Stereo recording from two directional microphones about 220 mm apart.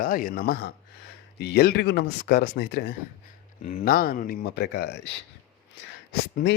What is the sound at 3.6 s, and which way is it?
Speech, 35° left (ahead or behind).